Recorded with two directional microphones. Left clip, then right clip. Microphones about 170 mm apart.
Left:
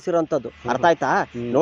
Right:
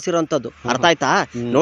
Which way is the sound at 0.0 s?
60° right (ahead or behind).